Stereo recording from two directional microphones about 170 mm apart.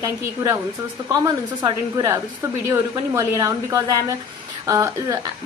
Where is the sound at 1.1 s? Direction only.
20° right (ahead or behind).